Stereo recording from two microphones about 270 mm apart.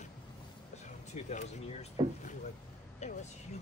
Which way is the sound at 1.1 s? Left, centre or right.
Left.